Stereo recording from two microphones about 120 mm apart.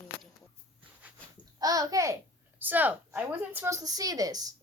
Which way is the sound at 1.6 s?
30° right (ahead or behind).